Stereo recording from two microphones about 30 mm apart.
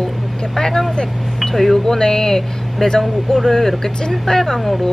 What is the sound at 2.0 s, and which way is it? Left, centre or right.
Speech, left.